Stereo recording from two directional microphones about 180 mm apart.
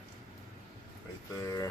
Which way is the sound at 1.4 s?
20° left (ahead or behind).